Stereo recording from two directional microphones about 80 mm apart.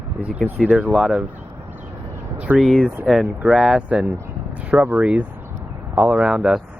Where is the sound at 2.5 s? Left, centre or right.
Centre.